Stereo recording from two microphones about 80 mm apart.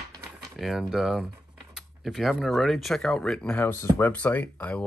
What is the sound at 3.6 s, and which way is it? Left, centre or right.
Speech, left.